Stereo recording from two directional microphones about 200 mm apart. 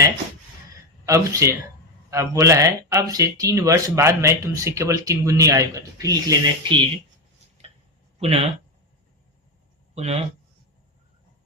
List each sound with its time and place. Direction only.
1.0 s speech: 15° right (ahead or behind)
8.2 s speech: 30° right (ahead or behind)
9.9 s speech: 30° right (ahead or behind)